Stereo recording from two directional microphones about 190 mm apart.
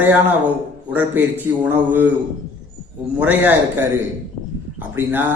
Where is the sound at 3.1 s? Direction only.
10° right (ahead or behind).